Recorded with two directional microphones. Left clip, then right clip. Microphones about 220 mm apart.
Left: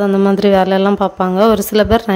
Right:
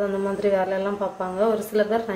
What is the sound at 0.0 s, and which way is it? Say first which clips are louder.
A woman's voice: left 10 dB; 50° left (ahead or behind).